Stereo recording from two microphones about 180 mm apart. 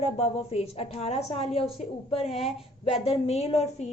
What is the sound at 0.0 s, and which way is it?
A woman's voice, 35° left (ahead or behind).